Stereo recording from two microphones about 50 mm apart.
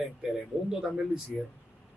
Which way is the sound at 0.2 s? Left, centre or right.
Centre.